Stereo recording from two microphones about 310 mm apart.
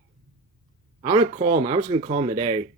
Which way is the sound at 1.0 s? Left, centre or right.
Centre.